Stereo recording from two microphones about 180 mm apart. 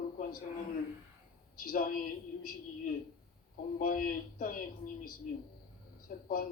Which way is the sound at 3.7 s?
55° left (ahead or behind).